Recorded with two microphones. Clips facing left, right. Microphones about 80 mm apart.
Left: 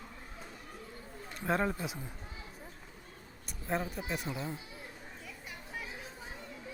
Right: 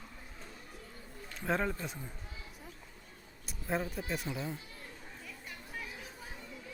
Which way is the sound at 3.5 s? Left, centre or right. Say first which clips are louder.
Even; centre.